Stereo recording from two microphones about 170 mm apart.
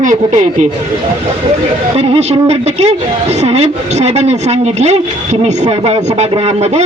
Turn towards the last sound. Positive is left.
turn(degrees=-35)  # may be behind; listen again after turning